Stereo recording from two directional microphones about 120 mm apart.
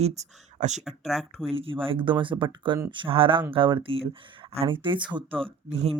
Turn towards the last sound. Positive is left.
turn(degrees=-50)  # may be behind; listen again after turning